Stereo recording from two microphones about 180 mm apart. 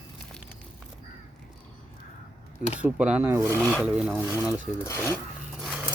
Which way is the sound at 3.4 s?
10° left (ahead or behind).